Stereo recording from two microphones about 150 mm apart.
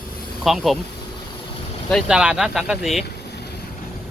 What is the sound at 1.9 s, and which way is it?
Speech, centre (ahead or behind).